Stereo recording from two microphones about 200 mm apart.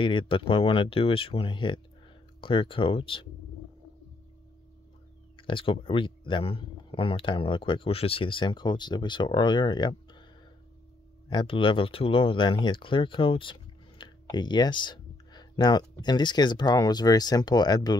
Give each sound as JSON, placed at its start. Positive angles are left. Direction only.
{"t": 0.0, "sound": "speech", "side_deg": 25}
{"t": 5.5, "sound": "speech", "side_deg": 25}
{"t": 11.2, "sound": "speech", "side_deg": 25}